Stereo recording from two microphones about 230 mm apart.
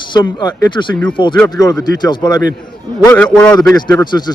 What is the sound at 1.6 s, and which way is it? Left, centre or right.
Speech, centre.